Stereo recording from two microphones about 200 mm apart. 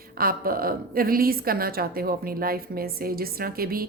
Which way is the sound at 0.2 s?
45° right (ahead or behind).